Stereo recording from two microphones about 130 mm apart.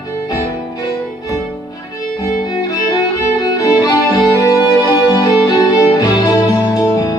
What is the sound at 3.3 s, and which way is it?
Music, 25° left (ahead or behind).